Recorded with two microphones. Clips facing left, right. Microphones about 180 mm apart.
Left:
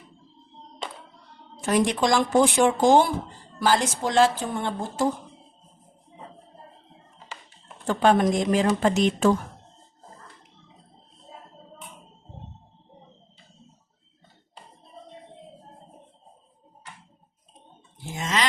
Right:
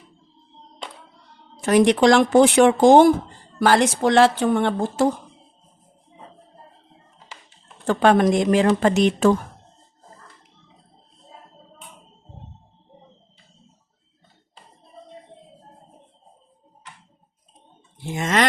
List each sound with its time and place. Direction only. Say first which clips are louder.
1.6 s a woman's voice: right 7 dB; 75° right (ahead or behind)
7.9 s a woman's voice: right 4 dB; 75° right (ahead or behind)
18.0 s a sound: right 6 dB; 60° right (ahead or behind)